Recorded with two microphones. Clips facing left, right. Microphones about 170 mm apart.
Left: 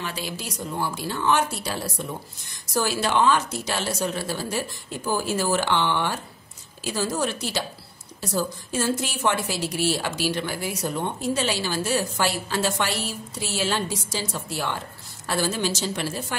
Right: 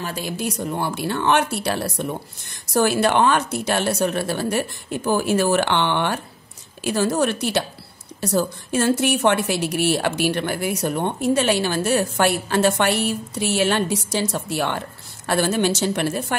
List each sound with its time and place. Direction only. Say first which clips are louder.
0.0 s a woman's voice: right 6 dB; 50° right (ahead or behind)